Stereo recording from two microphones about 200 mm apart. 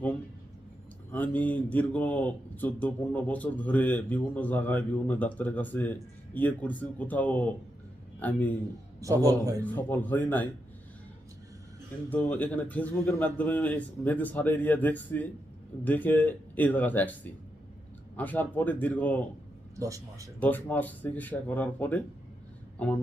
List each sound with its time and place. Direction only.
1.1 s speech: 10° left (ahead or behind)
9.2 s a man's voice: 15° right (ahead or behind)
9.6 s speech: 10° left (ahead or behind)
12.1 s speech: 5° left (ahead or behind)
19.8 s a man's voice: 15° right (ahead or behind)
20.4 s speech: 5° left (ahead or behind)